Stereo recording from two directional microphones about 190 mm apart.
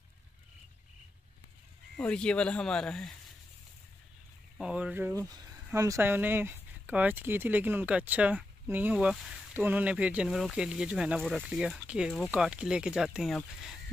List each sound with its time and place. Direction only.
2.0 s speech: 5° left (ahead or behind)
4.6 s speech: 5° right (ahead or behind)
5.3 s a sound: 20° right (ahead or behind)
5.7 s speech: 15° right (ahead or behind)